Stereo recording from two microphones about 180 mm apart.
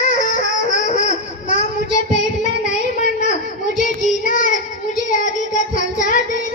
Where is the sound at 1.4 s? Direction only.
40° left (ahead or behind).